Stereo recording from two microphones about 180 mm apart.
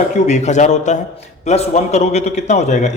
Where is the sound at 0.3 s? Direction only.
40° left (ahead or behind).